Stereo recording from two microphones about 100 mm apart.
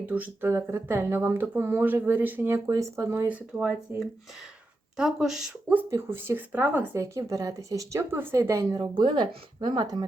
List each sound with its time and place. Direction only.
0.0 s speech: 20° right (ahead or behind)
2.6 s speech: 30° right (ahead or behind)
3.2 s speech: 10° right (ahead or behind)
5.9 s speech: 25° right (ahead or behind)
7.0 s speech: 35° right (ahead or behind)
8.8 s speech: 50° right (ahead or behind)